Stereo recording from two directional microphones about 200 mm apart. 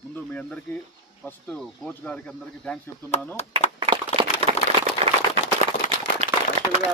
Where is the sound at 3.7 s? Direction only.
25° right (ahead or behind).